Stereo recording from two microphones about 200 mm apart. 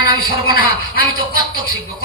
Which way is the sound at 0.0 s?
50° left (ahead or behind).